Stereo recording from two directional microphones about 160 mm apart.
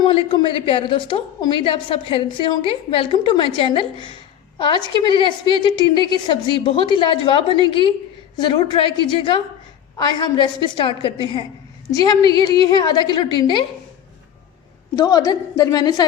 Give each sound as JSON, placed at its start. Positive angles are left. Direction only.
{"t": 0.0, "sound": "a woman's voice", "side_deg": 30}
{"t": 14.9, "sound": "a woman's voice", "side_deg": 20}